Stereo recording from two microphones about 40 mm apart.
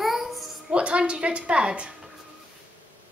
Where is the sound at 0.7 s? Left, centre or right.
Right.